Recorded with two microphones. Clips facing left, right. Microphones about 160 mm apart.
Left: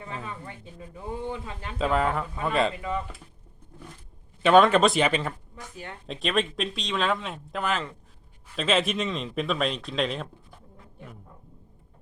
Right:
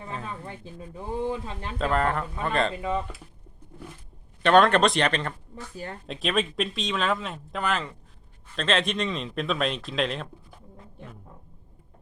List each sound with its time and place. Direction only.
1.3 s speech: 30° right (ahead or behind)
1.8 s speech: centre (ahead or behind)
4.4 s speech: 5° left (ahead or behind)
5.7 s speech: 40° right (ahead or behind)
6.1 s speech: centre (ahead or behind)